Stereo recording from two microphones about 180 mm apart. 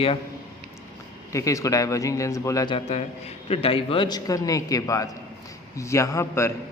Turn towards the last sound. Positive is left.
turn(degrees=15)  # may be behind; listen again after turning